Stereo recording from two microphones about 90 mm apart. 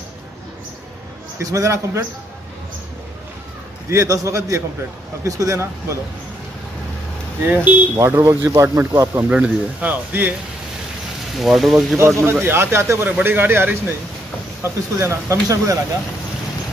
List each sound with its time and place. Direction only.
1.4 s speech: 35° right (ahead or behind)
3.9 s speech: 35° right (ahead or behind)
7.4 s speech: 20° right (ahead or behind)
7.9 s speech: 30° right (ahead or behind)
9.3 s speech: 15° right (ahead or behind)
11.3 s speech: centre (ahead or behind)
12.2 s speech: 25° right (ahead or behind)